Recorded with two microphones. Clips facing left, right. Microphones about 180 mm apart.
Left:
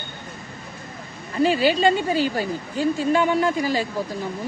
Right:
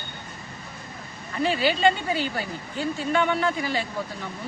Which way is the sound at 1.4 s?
40° left (ahead or behind).